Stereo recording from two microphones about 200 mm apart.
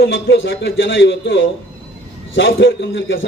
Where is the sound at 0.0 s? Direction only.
65° left (ahead or behind).